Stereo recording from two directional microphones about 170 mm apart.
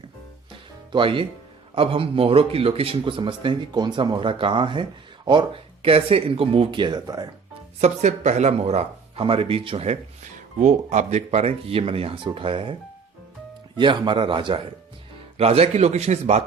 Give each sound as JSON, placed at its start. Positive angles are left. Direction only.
{"t": 0.9, "sound": "a man's voice", "side_deg": -30}
{"t": 7.8, "sound": "speech", "side_deg": -40}
{"t": 13.7, "sound": "a man's voice", "side_deg": -25}